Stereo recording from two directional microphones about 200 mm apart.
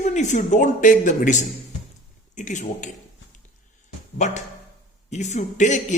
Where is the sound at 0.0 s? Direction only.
35° left (ahead or behind).